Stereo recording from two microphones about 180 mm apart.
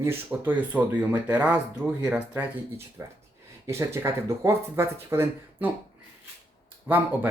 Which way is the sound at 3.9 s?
15° right (ahead or behind).